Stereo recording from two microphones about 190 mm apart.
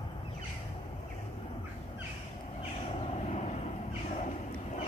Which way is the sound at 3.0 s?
35° left (ahead or behind).